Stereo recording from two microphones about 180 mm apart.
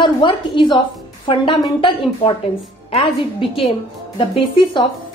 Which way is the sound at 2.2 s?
30° left (ahead or behind).